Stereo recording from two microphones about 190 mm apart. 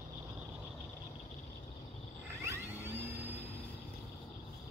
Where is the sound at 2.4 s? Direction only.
15° right (ahead or behind).